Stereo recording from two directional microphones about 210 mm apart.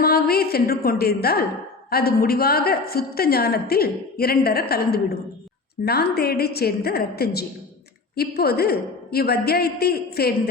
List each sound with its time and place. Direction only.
0.0 s a woman's voice: 45° left (ahead or behind)